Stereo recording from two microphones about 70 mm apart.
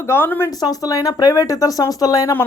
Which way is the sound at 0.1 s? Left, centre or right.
Left.